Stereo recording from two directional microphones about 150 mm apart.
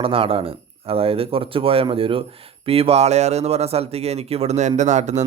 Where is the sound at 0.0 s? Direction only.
40° right (ahead or behind).